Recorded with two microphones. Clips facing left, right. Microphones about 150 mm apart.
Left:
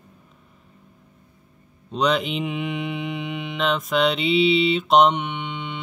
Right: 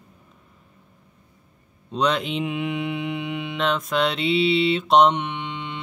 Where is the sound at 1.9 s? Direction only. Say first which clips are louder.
Left 1 dB; centre (ahead or behind).